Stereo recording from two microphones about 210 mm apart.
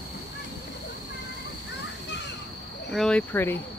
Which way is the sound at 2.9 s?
5° left (ahead or behind).